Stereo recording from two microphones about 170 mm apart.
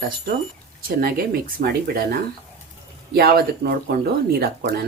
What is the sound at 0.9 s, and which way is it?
Speech, 60° right (ahead or behind).